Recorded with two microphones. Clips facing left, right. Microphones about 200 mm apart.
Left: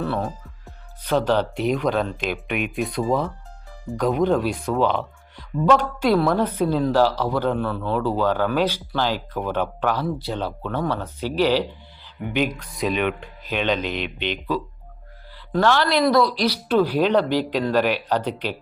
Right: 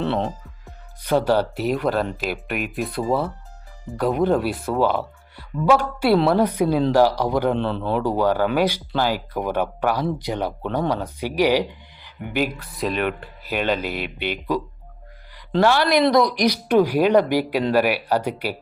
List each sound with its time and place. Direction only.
0.0 s a man's voice: 25° right (ahead or behind)
1.0 s speech: 10° right (ahead or behind)
7.6 s a man's voice: 25° right (ahead or behind)
7.9 s speech: 15° right (ahead or behind)
15.6 s speech: 10° right (ahead or behind)